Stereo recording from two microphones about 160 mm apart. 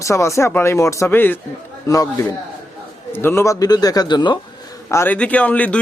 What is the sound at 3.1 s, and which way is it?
A man's voice, 15° left (ahead or behind).